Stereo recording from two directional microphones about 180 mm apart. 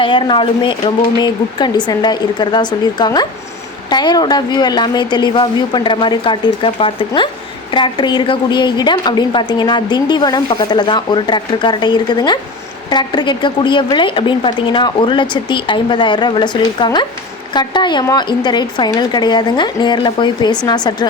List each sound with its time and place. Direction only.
0.0 s a woman's voice: 25° left (ahead or behind)